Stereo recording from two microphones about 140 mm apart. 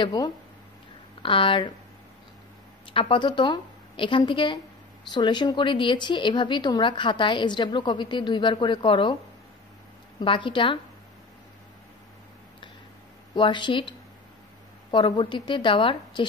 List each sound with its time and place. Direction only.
0.0 s a woman's voice: 30° left (ahead or behind)
2.9 s a woman's voice: 40° left (ahead or behind)
10.2 s a woman's voice: 35° left (ahead or behind)
13.3 s a woman's voice: 35° left (ahead or behind)